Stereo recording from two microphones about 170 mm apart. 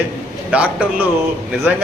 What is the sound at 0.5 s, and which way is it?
Speech, 10° right (ahead or behind).